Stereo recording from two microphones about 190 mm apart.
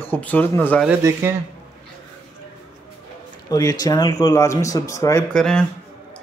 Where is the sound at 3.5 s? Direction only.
20° left (ahead or behind).